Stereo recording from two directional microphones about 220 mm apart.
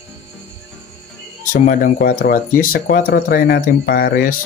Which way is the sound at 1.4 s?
35° left (ahead or behind).